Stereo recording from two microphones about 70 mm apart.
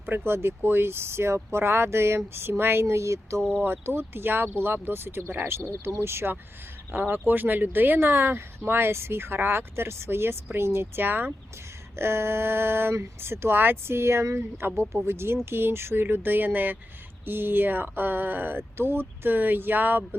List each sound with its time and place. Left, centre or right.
0.0 s speech: right
3.6 s speech: right